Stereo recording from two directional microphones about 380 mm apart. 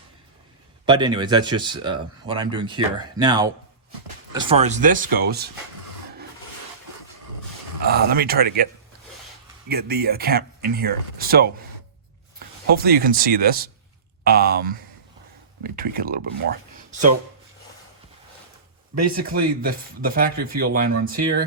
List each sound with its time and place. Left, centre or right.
0.9 s speech: centre
7.9 s speech: right
9.6 s speech: right
12.7 s speech: right
19.2 s speech: right